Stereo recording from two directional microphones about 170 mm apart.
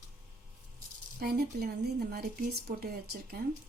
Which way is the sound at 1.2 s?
60° right (ahead or behind).